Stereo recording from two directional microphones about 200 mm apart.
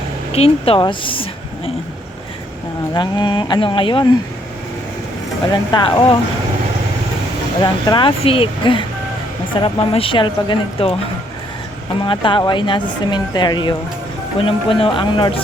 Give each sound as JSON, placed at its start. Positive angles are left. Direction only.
{"t": 0.3, "sound": "a woman's voice", "side_deg": 30}
{"t": 2.9, "sound": "speech", "side_deg": 20}
{"t": 5.5, "sound": "speech", "side_deg": 20}
{"t": 7.6, "sound": "speech", "side_deg": 20}
{"t": 12.0, "sound": "speech", "side_deg": 25}